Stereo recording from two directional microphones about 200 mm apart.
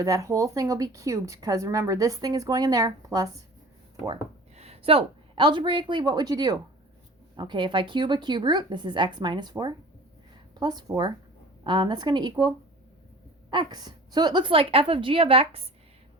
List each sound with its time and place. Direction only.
0.0 s a woman's voice: 15° right (ahead or behind)
4.5 s a woman's voice: 30° right (ahead or behind)